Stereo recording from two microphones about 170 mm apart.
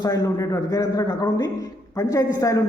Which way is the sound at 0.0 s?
20° left (ahead or behind).